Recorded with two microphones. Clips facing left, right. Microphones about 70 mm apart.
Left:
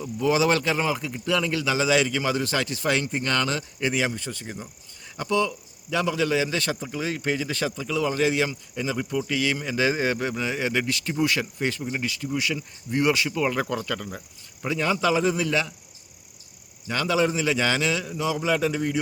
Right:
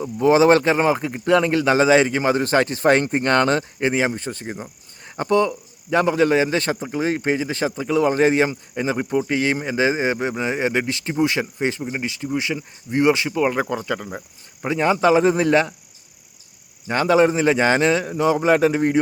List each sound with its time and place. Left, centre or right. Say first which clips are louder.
0.0 s a man's voice: right 7 dB; right
16.8 s a man's voice: right 7 dB; right